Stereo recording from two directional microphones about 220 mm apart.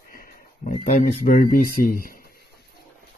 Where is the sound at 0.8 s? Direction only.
40° left (ahead or behind).